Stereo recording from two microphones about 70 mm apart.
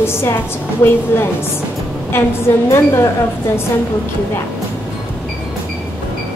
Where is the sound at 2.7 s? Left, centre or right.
Left.